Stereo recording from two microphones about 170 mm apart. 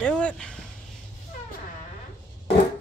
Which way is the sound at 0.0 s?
5° left (ahead or behind).